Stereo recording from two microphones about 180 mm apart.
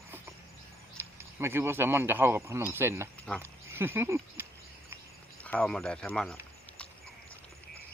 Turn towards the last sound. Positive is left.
turn(degrees=5)  # may be behind; listen again after turning